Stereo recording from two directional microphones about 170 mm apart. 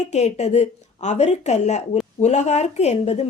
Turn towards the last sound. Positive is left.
turn(degrees=40)  # may be behind; listen again after turning